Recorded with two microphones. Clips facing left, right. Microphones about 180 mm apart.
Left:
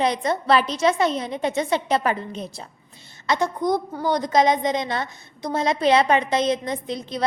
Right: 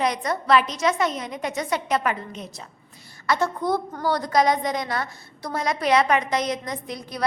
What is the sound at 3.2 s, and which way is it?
A woman's voice, 20° left (ahead or behind).